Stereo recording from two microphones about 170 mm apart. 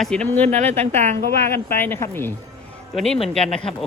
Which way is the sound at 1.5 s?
15° left (ahead or behind).